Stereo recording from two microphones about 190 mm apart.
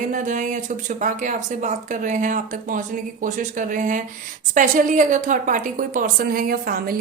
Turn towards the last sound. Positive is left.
turn(degrees=-50)  # may be behind; listen again after turning